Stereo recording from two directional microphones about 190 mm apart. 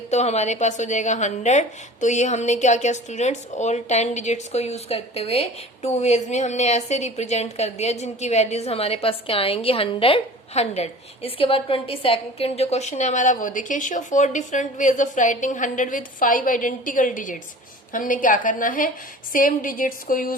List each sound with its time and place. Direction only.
0.1 s a woman's voice: 35° left (ahead or behind)